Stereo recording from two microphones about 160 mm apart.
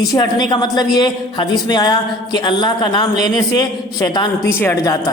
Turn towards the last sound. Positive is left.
turn(degrees=20)  # may be behind; listen again after turning